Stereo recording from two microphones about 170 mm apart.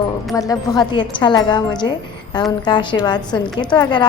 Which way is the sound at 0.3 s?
20° left (ahead or behind).